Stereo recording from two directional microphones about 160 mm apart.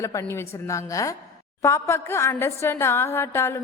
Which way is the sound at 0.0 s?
20° left (ahead or behind).